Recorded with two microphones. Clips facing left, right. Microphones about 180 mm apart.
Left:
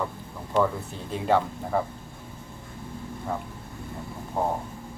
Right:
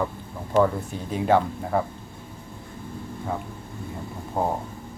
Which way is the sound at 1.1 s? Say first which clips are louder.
Right 3 dB; centre (ahead or behind).